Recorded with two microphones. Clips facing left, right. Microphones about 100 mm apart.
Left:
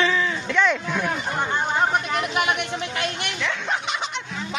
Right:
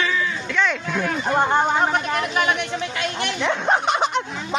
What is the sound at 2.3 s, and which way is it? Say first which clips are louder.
Speech: right 2 dB; 35° right (ahead or behind).